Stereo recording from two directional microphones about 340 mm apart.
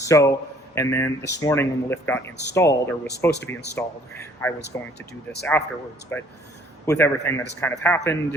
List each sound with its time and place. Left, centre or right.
0.0 s a man's voice: centre
4.9 s speech: left
6.1 s speech: centre